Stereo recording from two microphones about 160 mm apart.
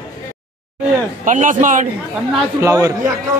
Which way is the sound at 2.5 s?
20° right (ahead or behind).